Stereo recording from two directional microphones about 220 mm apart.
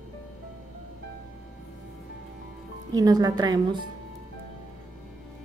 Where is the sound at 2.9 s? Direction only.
15° right (ahead or behind).